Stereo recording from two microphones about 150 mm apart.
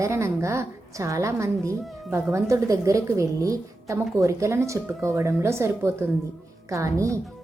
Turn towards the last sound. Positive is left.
turn(degrees=-20)  # may be behind; listen again after turning